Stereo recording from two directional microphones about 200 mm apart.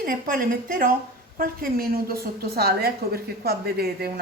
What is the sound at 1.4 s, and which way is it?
A woman's voice, 45° right (ahead or behind).